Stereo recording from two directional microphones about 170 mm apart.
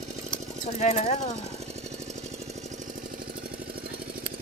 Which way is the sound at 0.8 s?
40° left (ahead or behind).